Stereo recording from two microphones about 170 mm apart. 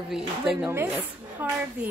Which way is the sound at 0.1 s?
Centre (ahead or behind).